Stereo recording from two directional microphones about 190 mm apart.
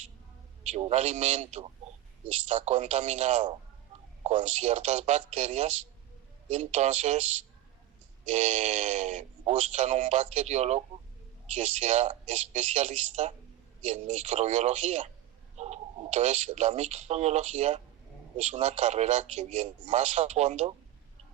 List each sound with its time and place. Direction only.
0.6 s a man's voice: 35° right (ahead or behind)
8.3 s a man's voice: 35° right (ahead or behind)